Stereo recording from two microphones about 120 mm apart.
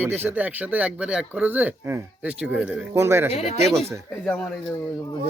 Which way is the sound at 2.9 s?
20° right (ahead or behind).